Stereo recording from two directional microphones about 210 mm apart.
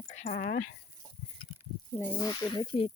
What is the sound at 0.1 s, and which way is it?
Speech, 40° left (ahead or behind).